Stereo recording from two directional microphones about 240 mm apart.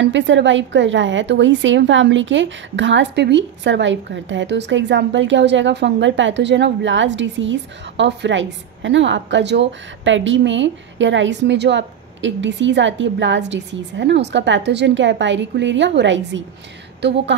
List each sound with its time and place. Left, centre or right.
0.0 s a woman's voice: right